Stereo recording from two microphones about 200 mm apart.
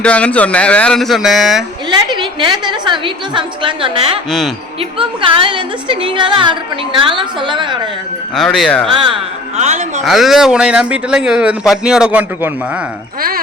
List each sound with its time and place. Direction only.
0.0 s speech: 5° left (ahead or behind)
2.1 s a woman's voice: 25° right (ahead or behind)
4.3 s speech: centre (ahead or behind)
4.8 s a woman's voice: 25° right (ahead or behind)
8.4 s speech: centre (ahead or behind)
9.0 s speech: 25° right (ahead or behind)
10.0 s speech: centre (ahead or behind)